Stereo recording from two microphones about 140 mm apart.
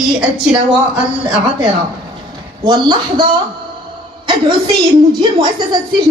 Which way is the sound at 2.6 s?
30° right (ahead or behind).